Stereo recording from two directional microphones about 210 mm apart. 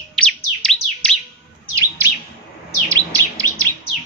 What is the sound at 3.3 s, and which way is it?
Chirp, 15° right (ahead or behind).